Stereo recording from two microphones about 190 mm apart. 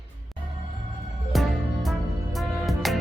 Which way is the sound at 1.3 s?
Centre (ahead or behind).